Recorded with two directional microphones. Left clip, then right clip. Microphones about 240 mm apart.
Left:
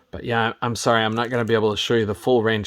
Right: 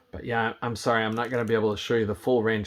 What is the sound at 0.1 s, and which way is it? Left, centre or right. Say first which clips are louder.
Speech: left 5 dB; left.